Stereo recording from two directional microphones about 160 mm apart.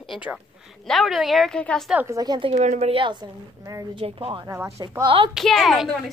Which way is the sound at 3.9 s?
35° right (ahead or behind).